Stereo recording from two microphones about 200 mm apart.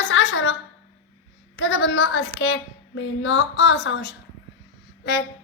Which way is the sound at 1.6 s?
70° left (ahead or behind).